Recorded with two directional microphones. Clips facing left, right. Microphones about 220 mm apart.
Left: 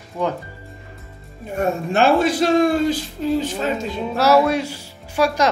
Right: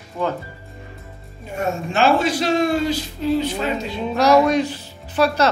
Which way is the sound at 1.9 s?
55° left (ahead or behind).